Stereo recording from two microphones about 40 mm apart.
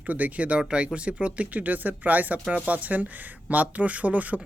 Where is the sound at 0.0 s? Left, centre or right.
Right.